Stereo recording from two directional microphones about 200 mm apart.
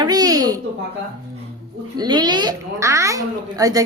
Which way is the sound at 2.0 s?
20° right (ahead or behind).